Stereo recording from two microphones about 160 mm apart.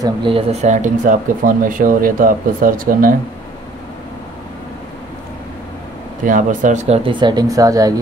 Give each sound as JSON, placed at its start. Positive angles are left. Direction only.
{"t": 0.0, "sound": "speech", "side_deg": -30}
{"t": 6.2, "sound": "speech", "side_deg": -55}
{"t": 7.1, "sound": "speech", "side_deg": -30}